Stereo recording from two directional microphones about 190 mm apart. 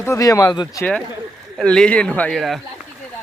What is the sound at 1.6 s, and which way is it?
Speech, 5° left (ahead or behind).